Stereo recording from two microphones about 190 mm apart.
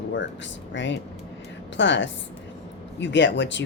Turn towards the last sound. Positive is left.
turn(degrees=70)  # may be behind; listen again after turning